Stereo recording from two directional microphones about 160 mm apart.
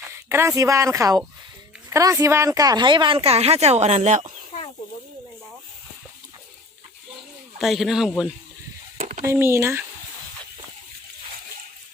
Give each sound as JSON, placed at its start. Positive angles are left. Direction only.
{"t": 0.1, "sound": "speech", "side_deg": -15}
{"t": 7.6, "sound": "a man's voice", "side_deg": 0}
{"t": 9.0, "sound": "a sound", "side_deg": -50}
{"t": 9.2, "sound": "speech", "side_deg": -15}